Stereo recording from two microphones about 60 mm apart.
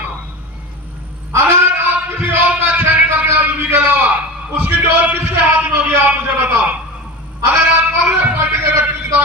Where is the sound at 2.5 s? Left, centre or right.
Right.